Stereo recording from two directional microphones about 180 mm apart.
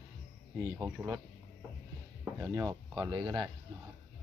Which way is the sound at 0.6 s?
15° right (ahead or behind).